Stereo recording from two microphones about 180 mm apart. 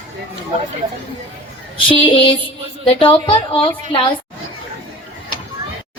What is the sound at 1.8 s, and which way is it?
A woman's voice, 30° left (ahead or behind).